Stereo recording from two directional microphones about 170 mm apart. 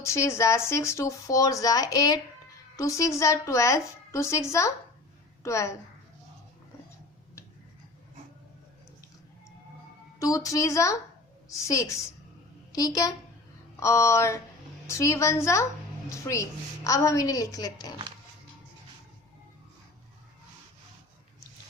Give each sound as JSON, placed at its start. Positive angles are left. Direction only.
{"t": 0.0, "sound": "a woman's voice", "side_deg": 15}
{"t": 10.2, "sound": "a woman's voice", "side_deg": 20}